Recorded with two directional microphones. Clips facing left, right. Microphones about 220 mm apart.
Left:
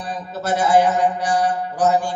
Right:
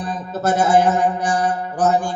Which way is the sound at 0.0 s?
50° right (ahead or behind).